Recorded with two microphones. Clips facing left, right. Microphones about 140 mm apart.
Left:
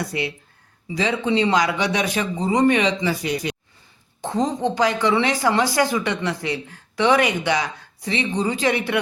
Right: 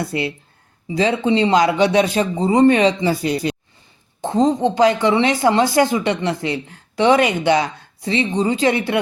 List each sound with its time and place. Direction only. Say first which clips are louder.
0.0 s speech: right 3 dB; 25° right (ahead or behind)